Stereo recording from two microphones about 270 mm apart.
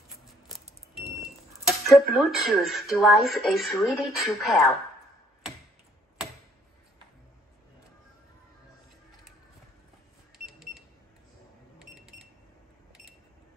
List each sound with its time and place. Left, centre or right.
1.2 s speech: centre
10.3 s cash register: centre
11.8 s a sound: centre